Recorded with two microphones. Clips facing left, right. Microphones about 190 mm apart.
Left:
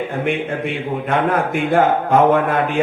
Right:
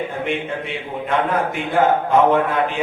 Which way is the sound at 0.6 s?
55° left (ahead or behind).